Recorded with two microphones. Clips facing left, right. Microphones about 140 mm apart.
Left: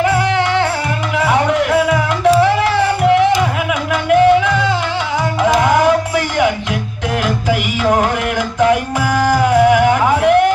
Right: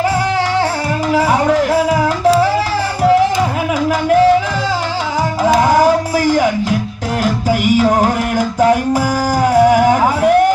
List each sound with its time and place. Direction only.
1.1 s music: 35° right (ahead or behind)